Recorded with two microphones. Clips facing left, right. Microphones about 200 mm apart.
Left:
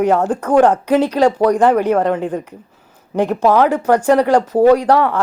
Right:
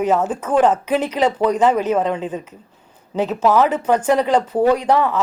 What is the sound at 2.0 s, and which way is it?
Speech, 65° left (ahead or behind).